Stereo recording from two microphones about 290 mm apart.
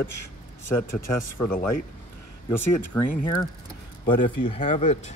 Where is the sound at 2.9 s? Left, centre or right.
Centre.